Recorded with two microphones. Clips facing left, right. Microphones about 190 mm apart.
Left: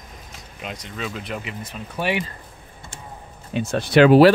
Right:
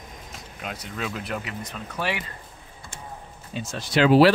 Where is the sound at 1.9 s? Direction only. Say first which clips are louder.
Left 5 dB; 20° left (ahead or behind).